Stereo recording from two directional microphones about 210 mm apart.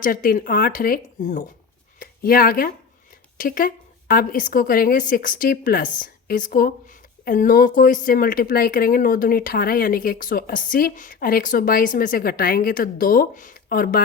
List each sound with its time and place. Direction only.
0.0 s speech: 40° left (ahead or behind)